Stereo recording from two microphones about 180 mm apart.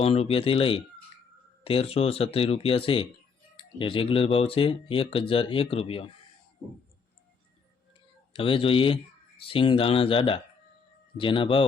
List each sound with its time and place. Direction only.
0.0 s speech: 35° left (ahead or behind)
8.3 s speech: 30° left (ahead or behind)